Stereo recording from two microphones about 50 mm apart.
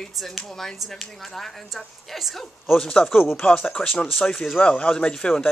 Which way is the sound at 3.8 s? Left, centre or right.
Centre.